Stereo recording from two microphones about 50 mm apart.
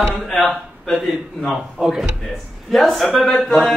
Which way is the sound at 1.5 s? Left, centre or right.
Centre.